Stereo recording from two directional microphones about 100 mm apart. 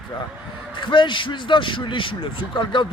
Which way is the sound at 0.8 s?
55° left (ahead or behind).